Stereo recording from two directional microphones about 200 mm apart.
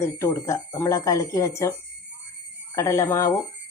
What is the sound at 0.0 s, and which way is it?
Speech, 15° left (ahead or behind).